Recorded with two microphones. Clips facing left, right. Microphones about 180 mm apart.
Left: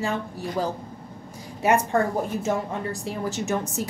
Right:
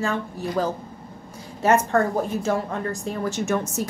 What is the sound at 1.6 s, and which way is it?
Speech, 15° left (ahead or behind).